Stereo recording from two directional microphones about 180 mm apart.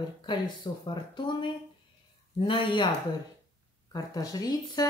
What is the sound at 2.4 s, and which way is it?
Speech, 30° left (ahead or behind).